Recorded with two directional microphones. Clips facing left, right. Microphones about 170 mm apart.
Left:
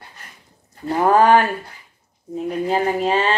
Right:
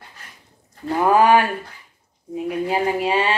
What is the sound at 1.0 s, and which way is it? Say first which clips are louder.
Speech: left 1 dB; 10° right (ahead or behind).